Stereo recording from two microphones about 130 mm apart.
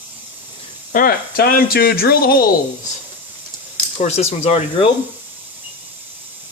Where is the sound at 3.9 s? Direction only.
60° left (ahead or behind).